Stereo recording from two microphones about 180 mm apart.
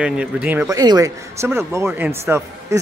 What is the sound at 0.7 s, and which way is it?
A man's voice, 20° right (ahead or behind).